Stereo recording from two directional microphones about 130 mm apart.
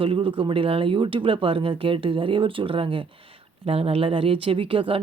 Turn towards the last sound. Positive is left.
turn(degrees=-45)  # may be behind; listen again after turning